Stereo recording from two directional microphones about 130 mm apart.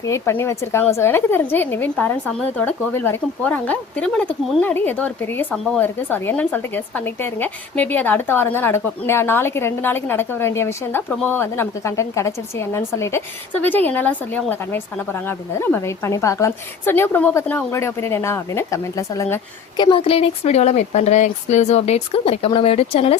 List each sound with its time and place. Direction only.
0.1 s a woman's voice: 20° left (ahead or behind)
19.7 s speech: 40° left (ahead or behind)